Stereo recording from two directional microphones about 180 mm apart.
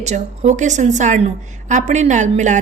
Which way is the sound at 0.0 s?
40° right (ahead or behind).